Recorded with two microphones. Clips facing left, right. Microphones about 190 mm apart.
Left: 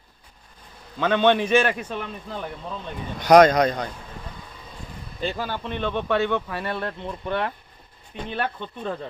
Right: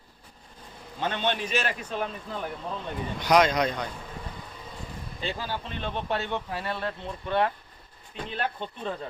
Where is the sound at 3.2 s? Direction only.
45° left (ahead or behind).